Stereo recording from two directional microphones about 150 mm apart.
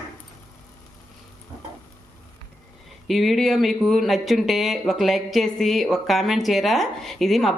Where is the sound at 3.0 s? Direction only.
Centre (ahead or behind).